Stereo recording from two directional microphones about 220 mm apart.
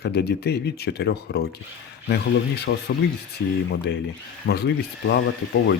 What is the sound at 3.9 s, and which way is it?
Speech, 50° left (ahead or behind).